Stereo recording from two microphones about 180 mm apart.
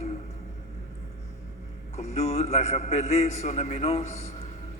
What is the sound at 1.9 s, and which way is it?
A man's voice, 35° left (ahead or behind).